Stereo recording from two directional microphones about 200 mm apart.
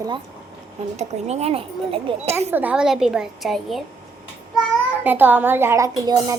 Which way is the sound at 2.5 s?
10° right (ahead or behind).